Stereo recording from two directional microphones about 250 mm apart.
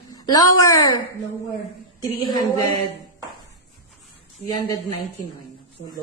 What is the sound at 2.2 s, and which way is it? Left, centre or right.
Speech, centre.